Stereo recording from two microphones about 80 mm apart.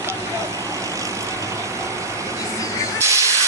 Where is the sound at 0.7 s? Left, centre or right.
Right.